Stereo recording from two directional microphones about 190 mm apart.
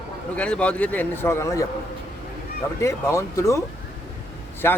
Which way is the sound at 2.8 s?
15° left (ahead or behind).